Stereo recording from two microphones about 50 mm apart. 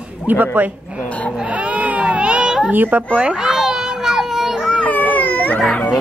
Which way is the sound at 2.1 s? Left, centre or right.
Right.